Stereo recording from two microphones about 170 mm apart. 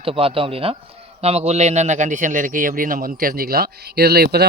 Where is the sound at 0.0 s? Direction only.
35° right (ahead or behind).